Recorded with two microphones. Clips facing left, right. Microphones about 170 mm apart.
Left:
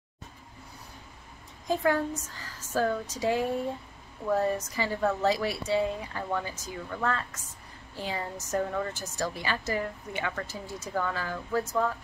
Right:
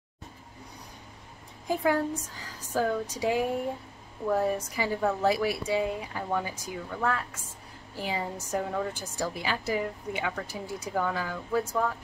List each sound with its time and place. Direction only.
1.7 s a woman's voice: 10° right (ahead or behind)